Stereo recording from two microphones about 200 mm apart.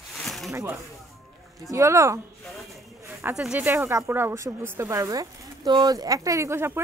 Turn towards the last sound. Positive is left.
turn(degrees=-10)  # may be behind; listen again after turning